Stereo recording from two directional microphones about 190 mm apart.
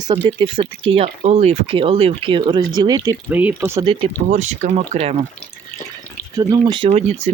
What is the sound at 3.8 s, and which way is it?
Speech, 25° right (ahead or behind).